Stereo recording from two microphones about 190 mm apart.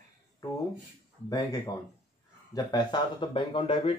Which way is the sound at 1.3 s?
20° left (ahead or behind).